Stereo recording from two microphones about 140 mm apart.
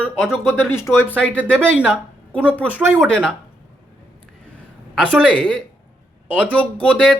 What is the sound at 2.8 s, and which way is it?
Speech, 15° right (ahead or behind).